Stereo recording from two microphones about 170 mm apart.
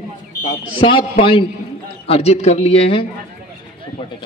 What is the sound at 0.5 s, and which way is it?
Speech, 30° left (ahead or behind).